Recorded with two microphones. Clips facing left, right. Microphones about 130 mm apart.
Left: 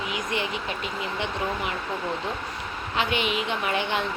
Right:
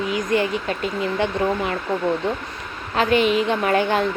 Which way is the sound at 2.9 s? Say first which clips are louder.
Right 9 dB; 40° right (ahead or behind).